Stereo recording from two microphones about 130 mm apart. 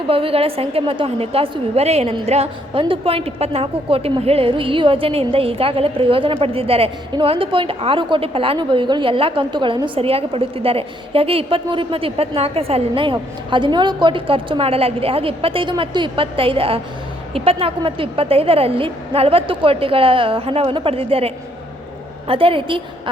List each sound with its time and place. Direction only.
0.1 s a woman's voice: 45° right (ahead or behind)